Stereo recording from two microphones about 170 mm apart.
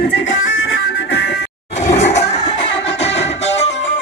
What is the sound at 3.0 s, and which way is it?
Music, 40° left (ahead or behind).